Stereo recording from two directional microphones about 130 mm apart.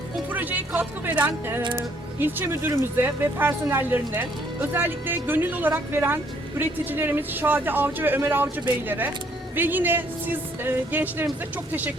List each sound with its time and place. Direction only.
0.3 s speech: 15° right (ahead or behind)